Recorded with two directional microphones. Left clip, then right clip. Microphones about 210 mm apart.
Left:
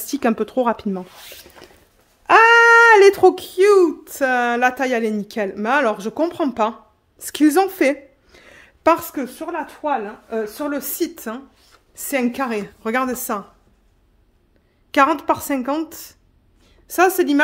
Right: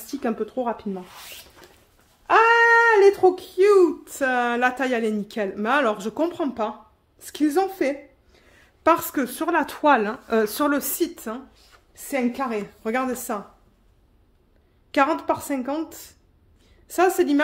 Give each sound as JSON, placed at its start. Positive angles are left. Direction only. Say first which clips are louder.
{"t": 0.0, "sound": "speech", "louder": "left 7 dB", "side_deg": 45}
{"t": 2.2, "sound": "a sound", "louder": "left 5 dB", "side_deg": 60}
{"t": 3.5, "sound": "speech", "louder": "left 3 dB", "side_deg": 25}
{"t": 7.2, "sound": "a sound", "louder": "left 6 dB", "side_deg": 35}
{"t": 8.8, "sound": "speech", "louder": "left 3 dB", "side_deg": 25}
{"t": 9.3, "sound": "speech", "louder": "right 4 dB", "side_deg": -30}
{"t": 10.4, "sound": "speech", "louder": "right 3 dB", "side_deg": -30}
{"t": 11.0, "sound": "speech", "louder": "left 2 dB", "side_deg": 30}
{"t": 12.0, "sound": "a woman's voice", "louder": "left 4 dB", "side_deg": 40}
{"t": 14.9, "sound": "speech", "louder": "left 5 dB", "side_deg": 30}